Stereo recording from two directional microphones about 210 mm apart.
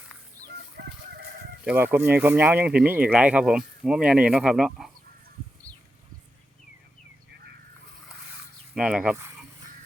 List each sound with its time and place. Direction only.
0.4 s chicken: 50° right (ahead or behind)
1.6 s speech: 10° right (ahead or behind)
5.7 s a sound: 5° left (ahead or behind)
8.7 s speech: 5° right (ahead or behind)